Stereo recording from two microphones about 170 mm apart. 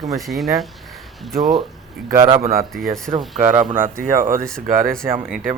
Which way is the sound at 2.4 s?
60° right (ahead or behind).